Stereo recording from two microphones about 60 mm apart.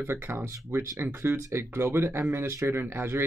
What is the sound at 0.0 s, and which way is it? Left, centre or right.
Speech, right.